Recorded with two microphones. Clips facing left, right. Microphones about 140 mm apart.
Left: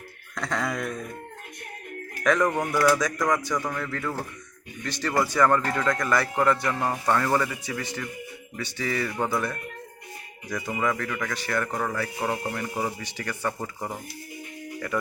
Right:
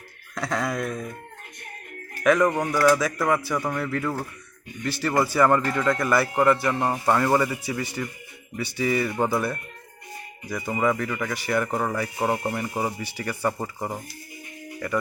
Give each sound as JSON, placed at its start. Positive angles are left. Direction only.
{"t": 0.3, "sound": "speech", "side_deg": -5}
{"t": 2.2, "sound": "speech", "side_deg": -5}
{"t": 10.8, "sound": "speech", "side_deg": -15}
{"t": 12.7, "sound": "speech", "side_deg": -10}